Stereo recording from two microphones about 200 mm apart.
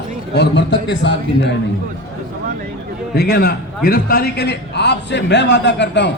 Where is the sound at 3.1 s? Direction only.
50° left (ahead or behind).